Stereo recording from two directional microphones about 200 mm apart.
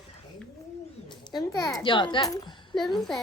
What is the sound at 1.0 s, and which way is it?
Bird, 20° left (ahead or behind).